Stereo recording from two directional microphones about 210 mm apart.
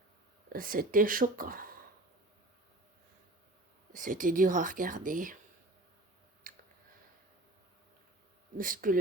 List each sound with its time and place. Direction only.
0.5 s speech: 40° right (ahead or behind)
3.9 s speech: 40° right (ahead or behind)
6.5 s a sound: 40° right (ahead or behind)
8.5 s speech: 40° right (ahead or behind)